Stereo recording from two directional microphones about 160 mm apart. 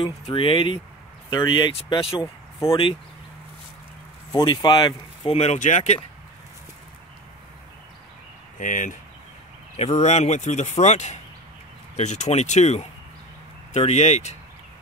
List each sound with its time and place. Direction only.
0.0 s speech: 35° left (ahead or behind)
4.3 s speech: 25° left (ahead or behind); by 5.9 s 50° left (ahead or behind)
8.5 s speech: 55° left (ahead or behind)